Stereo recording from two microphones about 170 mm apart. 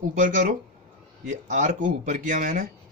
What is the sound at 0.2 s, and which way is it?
A man's voice, 50° right (ahead or behind).